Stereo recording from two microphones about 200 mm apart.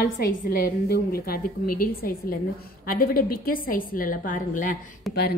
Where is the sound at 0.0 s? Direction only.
50° left (ahead or behind).